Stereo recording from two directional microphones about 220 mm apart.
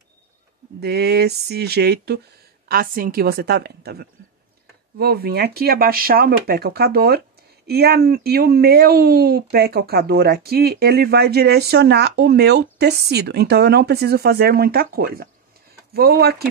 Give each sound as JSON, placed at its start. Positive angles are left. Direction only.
{"t": 0.7, "sound": "speech", "side_deg": -45}